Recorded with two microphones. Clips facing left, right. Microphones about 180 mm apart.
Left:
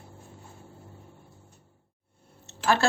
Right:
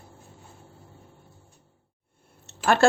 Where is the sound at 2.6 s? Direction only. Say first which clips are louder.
Right 5 dB; 55° right (ahead or behind).